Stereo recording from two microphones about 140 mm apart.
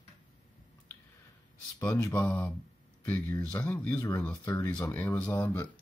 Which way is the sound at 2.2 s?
10° left (ahead or behind).